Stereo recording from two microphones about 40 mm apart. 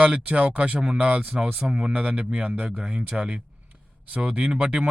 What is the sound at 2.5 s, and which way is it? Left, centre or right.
Speech, right.